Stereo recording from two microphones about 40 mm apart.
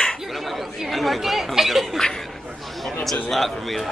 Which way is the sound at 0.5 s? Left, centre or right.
Centre.